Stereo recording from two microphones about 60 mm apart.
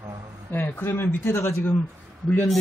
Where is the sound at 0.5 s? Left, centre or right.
Left.